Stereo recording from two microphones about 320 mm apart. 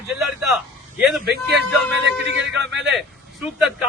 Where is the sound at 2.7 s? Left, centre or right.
Centre.